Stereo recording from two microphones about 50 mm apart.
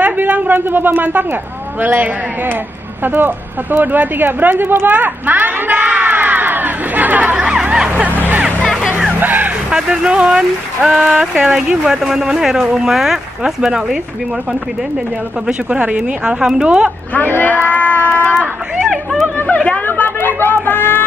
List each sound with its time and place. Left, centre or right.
0.0 s a sound: right
0.6 s a woman's voice: right
7.3 s speech: centre
9.2 s music: right
9.7 s speech: centre
15.4 s speech: right
17.1 s speech: left
19.3 s a sound: left
19.9 s speech: left